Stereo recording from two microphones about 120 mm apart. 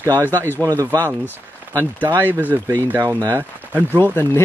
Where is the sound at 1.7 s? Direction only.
20° right (ahead or behind).